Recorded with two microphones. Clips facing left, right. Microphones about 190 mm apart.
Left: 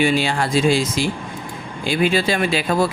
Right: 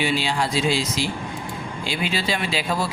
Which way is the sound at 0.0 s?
50° left (ahead or behind).